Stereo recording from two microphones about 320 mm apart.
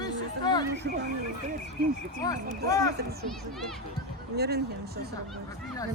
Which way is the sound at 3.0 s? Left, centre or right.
Right.